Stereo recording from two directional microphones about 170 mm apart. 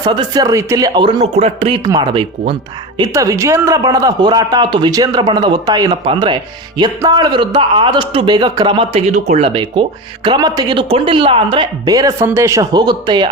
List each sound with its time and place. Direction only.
0.0 s a man's voice: 25° right (ahead or behind)
1.2 s speech: 40° right (ahead or behind)
1.8 s a man's voice: 25° right (ahead or behind)